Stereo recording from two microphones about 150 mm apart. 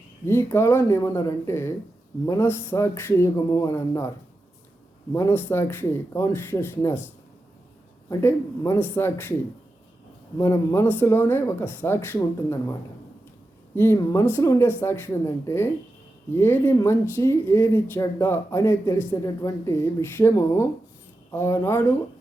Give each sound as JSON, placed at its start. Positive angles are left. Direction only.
{"t": 0.3, "sound": "speech", "side_deg": 15}
{"t": 5.1, "sound": "speech", "side_deg": 15}
{"t": 8.2, "sound": "speech", "side_deg": 15}
{"t": 10.3, "sound": "speech", "side_deg": 15}
{"t": 13.7, "sound": "speech", "side_deg": 15}